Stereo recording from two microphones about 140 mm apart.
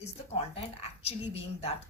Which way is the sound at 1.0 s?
45° left (ahead or behind).